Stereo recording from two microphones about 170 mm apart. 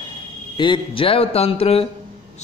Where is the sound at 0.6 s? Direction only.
30° left (ahead or behind).